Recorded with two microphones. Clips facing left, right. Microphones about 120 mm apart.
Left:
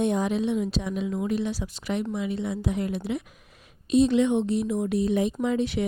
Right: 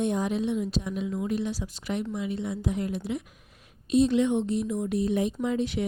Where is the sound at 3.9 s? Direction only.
90° left.